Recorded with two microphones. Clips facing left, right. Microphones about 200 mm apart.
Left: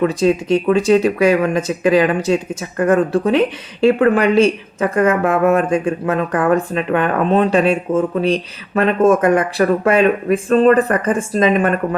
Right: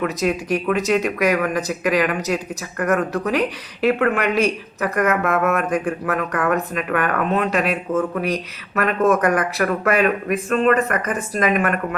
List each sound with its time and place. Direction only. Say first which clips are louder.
0.0 s speech: left 6 dB; 30° left (ahead or behind)